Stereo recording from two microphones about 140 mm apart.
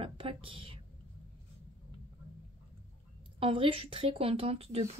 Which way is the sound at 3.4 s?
40° right (ahead or behind).